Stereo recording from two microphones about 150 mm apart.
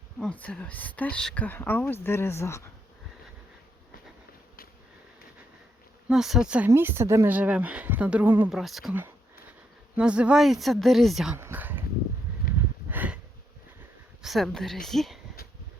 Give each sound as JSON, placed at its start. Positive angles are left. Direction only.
{"t": 0.2, "sound": "speech", "side_deg": 10}
{"t": 6.1, "sound": "a woman's voice", "side_deg": -5}
{"t": 8.4, "sound": "a woman's voice", "side_deg": 0}
{"t": 11.3, "sound": "a sound", "side_deg": -15}
{"t": 12.9, "sound": "a sound", "side_deg": -10}
{"t": 14.2, "sound": "a woman's voice", "side_deg": 0}